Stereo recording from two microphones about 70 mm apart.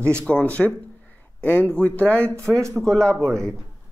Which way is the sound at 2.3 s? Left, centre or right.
Right.